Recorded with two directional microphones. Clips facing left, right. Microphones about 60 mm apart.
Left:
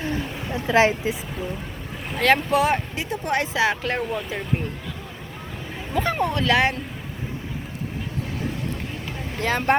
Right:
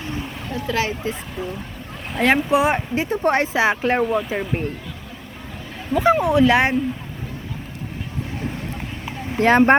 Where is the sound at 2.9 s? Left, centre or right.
Right.